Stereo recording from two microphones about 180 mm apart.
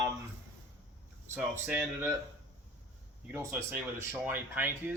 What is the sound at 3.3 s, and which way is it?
Speech, 15° right (ahead or behind).